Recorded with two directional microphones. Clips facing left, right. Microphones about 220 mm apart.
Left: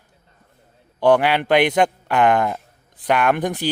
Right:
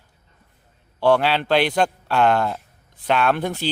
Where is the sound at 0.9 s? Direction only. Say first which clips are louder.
Left 2 dB; 15° left (ahead or behind).